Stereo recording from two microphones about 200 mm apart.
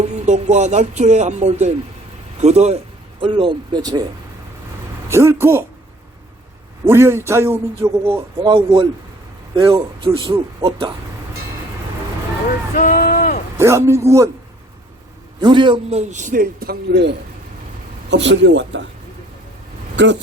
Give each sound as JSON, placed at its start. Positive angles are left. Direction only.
{"t": 0.3, "sound": "a man's voice", "side_deg": -35}
{"t": 5.0, "sound": "a man's voice", "side_deg": -15}
{"t": 6.8, "sound": "a man's voice", "side_deg": -10}
{"t": 8.5, "sound": "a man's voice", "side_deg": -25}
{"t": 12.7, "sound": "run", "side_deg": 45}
{"t": 13.6, "sound": "a man's voice", "side_deg": -15}
{"t": 15.4, "sound": "a man's voice", "side_deg": -25}
{"t": 20.0, "sound": "speech", "side_deg": -60}